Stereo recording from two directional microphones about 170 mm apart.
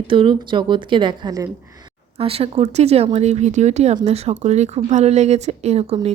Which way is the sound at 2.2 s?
35° right (ahead or behind).